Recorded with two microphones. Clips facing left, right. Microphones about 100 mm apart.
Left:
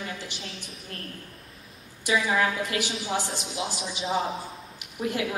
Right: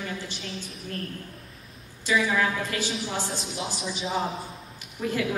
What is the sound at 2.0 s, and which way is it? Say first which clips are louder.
Speech: even; 15° left (ahead or behind).